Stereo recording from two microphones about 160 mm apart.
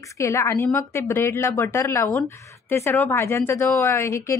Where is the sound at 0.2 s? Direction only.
15° left (ahead or behind).